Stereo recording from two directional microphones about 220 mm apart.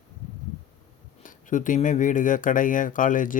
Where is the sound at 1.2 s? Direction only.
35° left (ahead or behind).